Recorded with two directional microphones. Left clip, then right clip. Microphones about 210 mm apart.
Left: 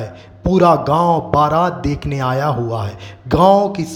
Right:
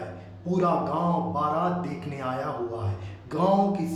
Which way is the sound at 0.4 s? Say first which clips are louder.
Left 13 dB; 40° left (ahead or behind).